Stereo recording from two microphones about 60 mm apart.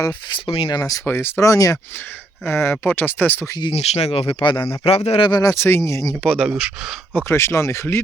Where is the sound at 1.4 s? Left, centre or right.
Left.